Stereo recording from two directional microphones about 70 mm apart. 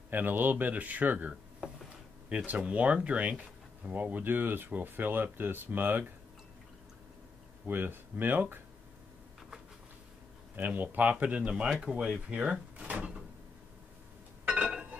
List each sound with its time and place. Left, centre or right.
0.1 s speech: right
7.6 s speech: right
10.5 s speech: right
14.4 s a sound: right